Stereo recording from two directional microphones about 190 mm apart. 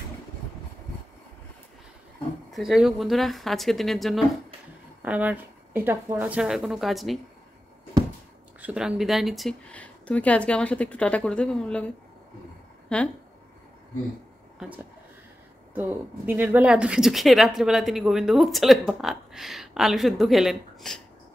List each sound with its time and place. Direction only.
2.5 s a woman's voice: centre (ahead or behind)
8.5 s a woman's voice: 5° right (ahead or behind)
12.9 s a woman's voice: 5° left (ahead or behind)
15.7 s a woman's voice: 10° right (ahead or behind)